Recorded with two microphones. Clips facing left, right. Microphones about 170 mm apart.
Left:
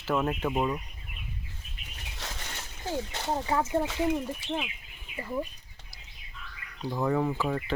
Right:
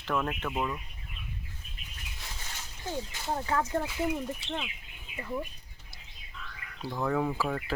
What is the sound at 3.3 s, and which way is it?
Speech, 20° left (ahead or behind).